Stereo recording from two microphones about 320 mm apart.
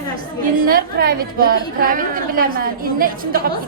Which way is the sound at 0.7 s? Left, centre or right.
Right.